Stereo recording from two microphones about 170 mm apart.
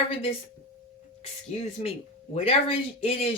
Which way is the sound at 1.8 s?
35° left (ahead or behind).